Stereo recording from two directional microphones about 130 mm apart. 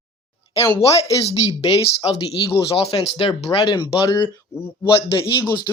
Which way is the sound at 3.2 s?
45° left (ahead or behind).